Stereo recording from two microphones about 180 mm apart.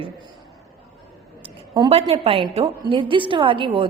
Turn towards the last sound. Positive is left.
turn(degrees=-30)  # may be behind; listen again after turning